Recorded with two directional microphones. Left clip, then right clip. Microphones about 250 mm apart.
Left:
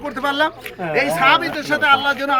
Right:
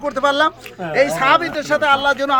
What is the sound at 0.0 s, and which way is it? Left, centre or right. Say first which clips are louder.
Speech: right 3 dB; right.